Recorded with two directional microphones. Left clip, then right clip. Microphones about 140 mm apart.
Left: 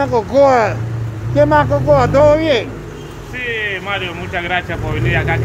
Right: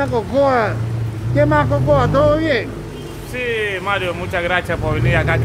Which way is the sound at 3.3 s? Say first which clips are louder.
Even; 40° right (ahead or behind).